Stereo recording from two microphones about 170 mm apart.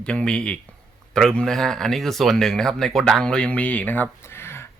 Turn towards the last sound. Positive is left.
turn(degrees=15)  # may be behind; listen again after turning